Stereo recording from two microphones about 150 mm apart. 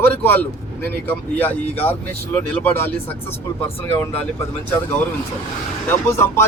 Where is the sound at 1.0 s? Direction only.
15° left (ahead or behind).